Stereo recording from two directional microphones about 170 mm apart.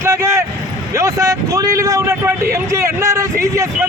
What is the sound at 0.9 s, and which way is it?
A man's voice, 20° right (ahead or behind).